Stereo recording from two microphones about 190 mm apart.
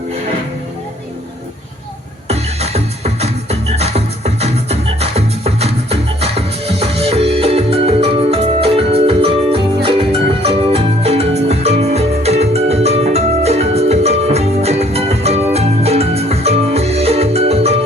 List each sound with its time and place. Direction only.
2.2 s music: 35° right (ahead or behind)